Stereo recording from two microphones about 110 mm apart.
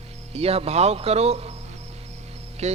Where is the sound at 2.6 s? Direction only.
90° right.